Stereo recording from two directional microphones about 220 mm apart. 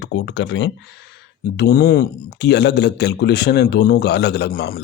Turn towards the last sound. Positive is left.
turn(degrees=45)  # may be behind; listen again after turning